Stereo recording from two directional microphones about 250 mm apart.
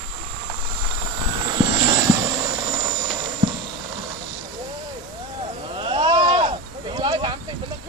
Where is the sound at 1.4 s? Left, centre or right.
Centre.